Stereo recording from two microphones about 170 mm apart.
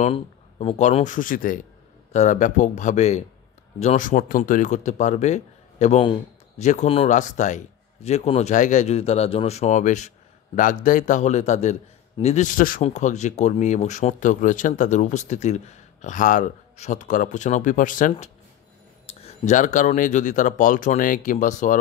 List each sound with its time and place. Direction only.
0.0 s speech: 35° left (ahead or behind); by 12.8 s 55° left (ahead or behind)
12.8 s speech: 45° left (ahead or behind)
19.0 s speech: 40° left (ahead or behind)